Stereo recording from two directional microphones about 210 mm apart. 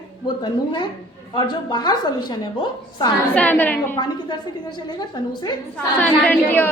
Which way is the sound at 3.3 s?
5° left (ahead or behind).